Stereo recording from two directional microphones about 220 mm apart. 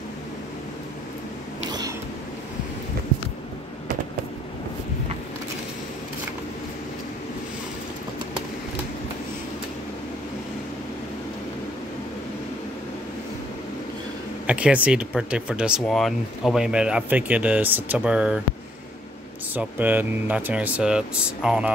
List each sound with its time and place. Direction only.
1.7 s a sound: 15° right (ahead or behind)
14.4 s speech: 5° right (ahead or behind)
19.5 s speech: 10° right (ahead or behind)